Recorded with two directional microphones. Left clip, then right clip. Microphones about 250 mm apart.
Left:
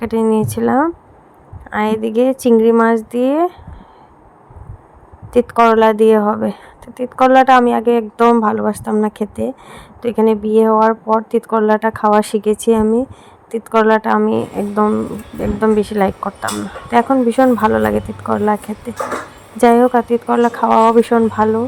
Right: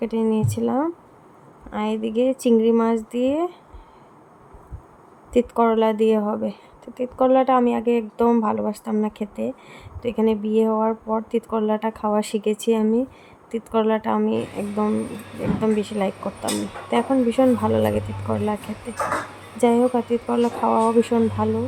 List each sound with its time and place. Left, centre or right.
0.0 s speech: left
5.3 s speech: left